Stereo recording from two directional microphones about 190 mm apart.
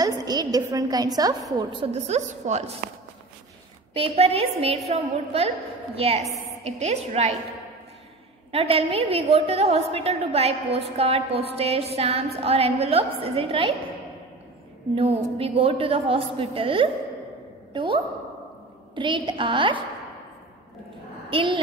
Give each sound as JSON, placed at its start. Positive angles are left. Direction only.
{"t": 0.0, "sound": "a woman's voice", "side_deg": -20}
{"t": 3.9, "sound": "a woman's voice", "side_deg": -30}
{"t": 8.5, "sound": "a woman's voice", "side_deg": -30}
{"t": 15.0, "sound": "a woman's voice", "side_deg": -30}
{"t": 21.3, "sound": "speech", "side_deg": -25}